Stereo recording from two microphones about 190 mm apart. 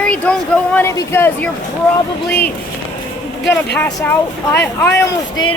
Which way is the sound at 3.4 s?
60° left (ahead or behind).